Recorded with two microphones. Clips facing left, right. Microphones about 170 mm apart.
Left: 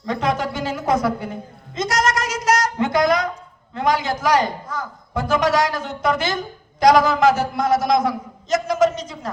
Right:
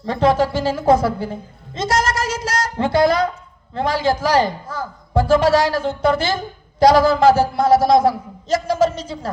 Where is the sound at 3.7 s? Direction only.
30° right (ahead or behind).